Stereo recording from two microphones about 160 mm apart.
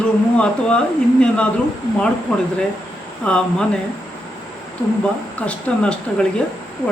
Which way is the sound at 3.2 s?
5° left (ahead or behind).